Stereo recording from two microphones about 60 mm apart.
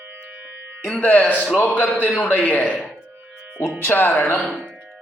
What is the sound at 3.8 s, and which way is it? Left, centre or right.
Speech, left.